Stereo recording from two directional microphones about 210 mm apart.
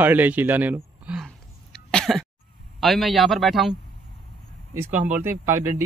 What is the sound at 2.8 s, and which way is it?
A man's voice, centre (ahead or behind).